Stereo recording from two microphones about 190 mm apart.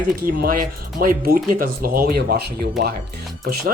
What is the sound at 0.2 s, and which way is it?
Speech, 50° right (ahead or behind).